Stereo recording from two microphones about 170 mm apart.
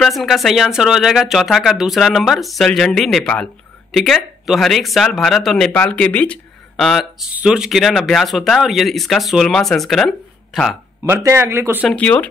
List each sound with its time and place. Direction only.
0.0 s speech: centre (ahead or behind)
11.1 s speech: 15° right (ahead or behind)
11.9 s speech: 10° left (ahead or behind)